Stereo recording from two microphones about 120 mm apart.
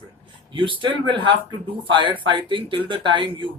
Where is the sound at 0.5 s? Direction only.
45° right (ahead or behind).